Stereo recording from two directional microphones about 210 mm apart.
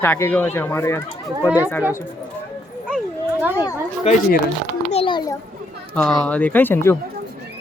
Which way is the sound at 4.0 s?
35° left (ahead or behind).